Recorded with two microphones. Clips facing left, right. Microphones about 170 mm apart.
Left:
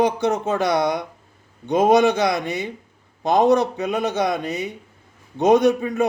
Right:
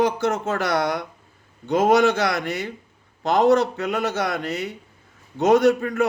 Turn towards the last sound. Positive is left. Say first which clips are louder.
# even
turn(degrees=20)  # may be behind; listen again after turning